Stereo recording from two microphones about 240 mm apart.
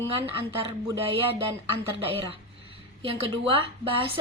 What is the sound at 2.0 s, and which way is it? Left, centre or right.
A woman's voice, right.